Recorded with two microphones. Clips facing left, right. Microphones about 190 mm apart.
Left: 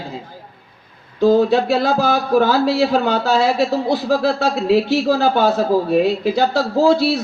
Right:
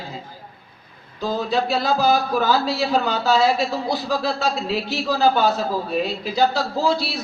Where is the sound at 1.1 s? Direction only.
55° left (ahead or behind).